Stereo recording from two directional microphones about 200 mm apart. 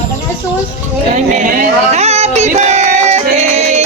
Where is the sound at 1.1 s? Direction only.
35° right (ahead or behind).